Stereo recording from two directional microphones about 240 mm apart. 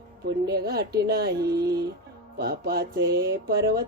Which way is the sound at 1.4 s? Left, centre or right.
Centre.